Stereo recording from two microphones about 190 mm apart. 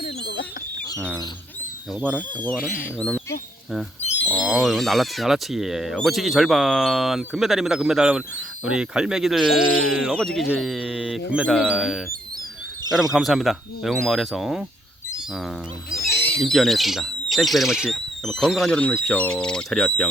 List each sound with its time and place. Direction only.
0.0 s a sound: 50° left (ahead or behind)
2.0 s speech: 5° left (ahead or behind)
2.6 s speech: 45° left (ahead or behind)
3.0 s speech: 5° left (ahead or behind)
4.3 s speech: 5° right (ahead or behind)
13.1 s speech: centre (ahead or behind)
16.0 s owl: 10° left (ahead or behind)
16.4 s speech: centre (ahead or behind)